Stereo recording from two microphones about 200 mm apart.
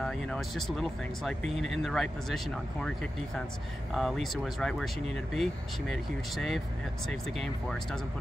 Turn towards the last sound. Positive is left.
turn(degrees=5)  # may be behind; listen again after turning